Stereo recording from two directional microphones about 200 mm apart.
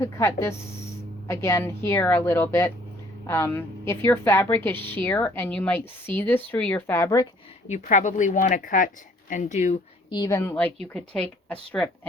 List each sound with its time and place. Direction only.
0.0 s a woman's voice: 15° left (ahead or behind)
7.7 s speech: 40° left (ahead or behind)
10.1 s a woman's voice: 20° left (ahead or behind)